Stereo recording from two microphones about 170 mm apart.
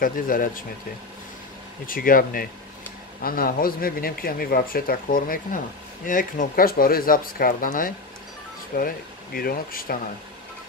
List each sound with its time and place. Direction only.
0.0 s a man's voice: 55° left (ahead or behind)
1.9 s a man's voice: 55° left (ahead or behind)